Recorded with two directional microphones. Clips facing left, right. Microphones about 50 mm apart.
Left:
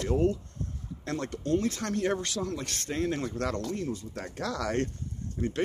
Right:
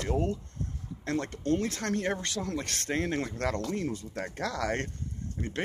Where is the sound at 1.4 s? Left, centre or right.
Right.